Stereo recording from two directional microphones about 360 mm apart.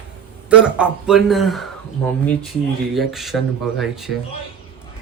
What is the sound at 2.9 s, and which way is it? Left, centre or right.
Speech, centre.